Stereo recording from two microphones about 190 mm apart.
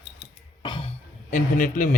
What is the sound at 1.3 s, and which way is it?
Speech, 45° left (ahead or behind).